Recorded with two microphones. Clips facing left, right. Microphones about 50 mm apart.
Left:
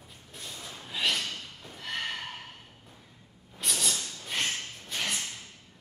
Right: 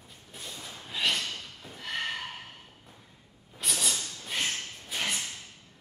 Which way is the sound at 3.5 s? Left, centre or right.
Centre.